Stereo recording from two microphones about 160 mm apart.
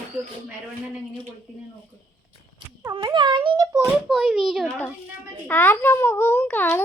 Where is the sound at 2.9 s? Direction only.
30° right (ahead or behind).